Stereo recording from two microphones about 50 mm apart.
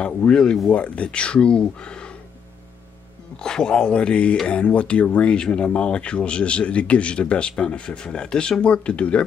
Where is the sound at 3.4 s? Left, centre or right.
Centre.